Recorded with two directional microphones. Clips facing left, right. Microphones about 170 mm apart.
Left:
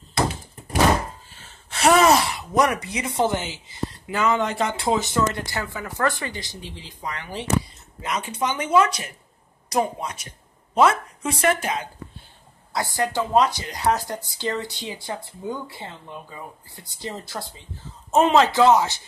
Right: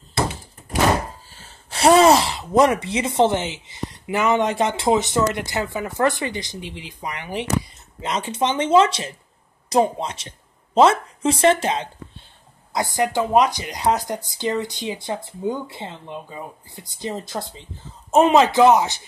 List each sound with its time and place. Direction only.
1.3 s a woman's voice: 35° right (ahead or behind); by 19.0 s 15° right (ahead or behind)